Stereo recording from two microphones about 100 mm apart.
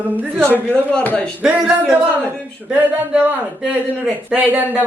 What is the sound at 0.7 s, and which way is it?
Speech, 15° left (ahead or behind).